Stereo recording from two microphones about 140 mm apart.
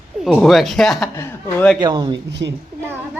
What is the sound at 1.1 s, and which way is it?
Speech, 20° left (ahead or behind).